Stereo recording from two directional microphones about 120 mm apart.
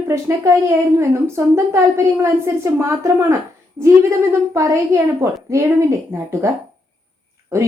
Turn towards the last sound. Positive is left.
turn(degrees=-25)  # may be behind; listen again after turning